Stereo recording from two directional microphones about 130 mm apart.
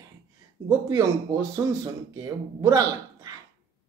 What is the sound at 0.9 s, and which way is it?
Speech, 25° right (ahead or behind).